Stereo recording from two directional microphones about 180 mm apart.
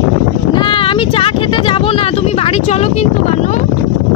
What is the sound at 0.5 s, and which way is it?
Vehicle, 25° left (ahead or behind).